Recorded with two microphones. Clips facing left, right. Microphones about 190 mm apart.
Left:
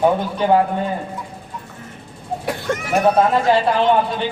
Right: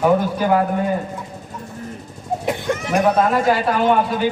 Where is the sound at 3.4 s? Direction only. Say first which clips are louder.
Left 2 dB; 25° left (ahead or behind).